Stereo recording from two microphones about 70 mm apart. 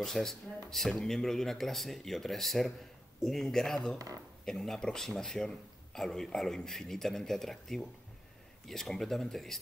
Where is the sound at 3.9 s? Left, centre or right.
Right.